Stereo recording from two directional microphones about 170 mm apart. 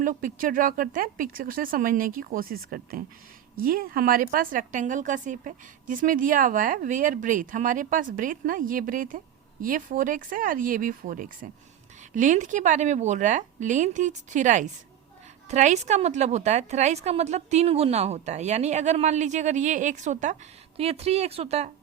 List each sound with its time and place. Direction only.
0.0 s a woman's voice: 50° right (ahead or behind)